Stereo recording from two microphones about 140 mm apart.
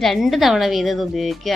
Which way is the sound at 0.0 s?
Centre (ahead or behind).